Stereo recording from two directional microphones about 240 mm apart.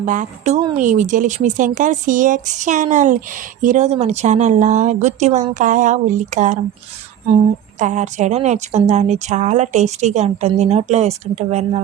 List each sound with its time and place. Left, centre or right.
0.0 s speech: right
7.8 s a woman's voice: right